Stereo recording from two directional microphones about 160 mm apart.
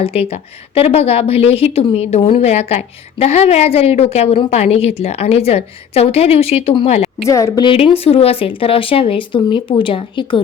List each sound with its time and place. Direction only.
0.0 s a woman's voice: 35° left (ahead or behind)
7.3 s a woman's voice: 20° left (ahead or behind)